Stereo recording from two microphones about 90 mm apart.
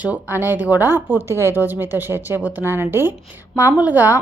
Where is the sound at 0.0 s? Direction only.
20° right (ahead or behind).